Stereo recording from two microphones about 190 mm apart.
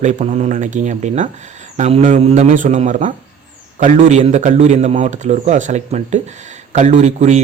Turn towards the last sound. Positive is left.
turn(degrees=-40)  # may be behind; listen again after turning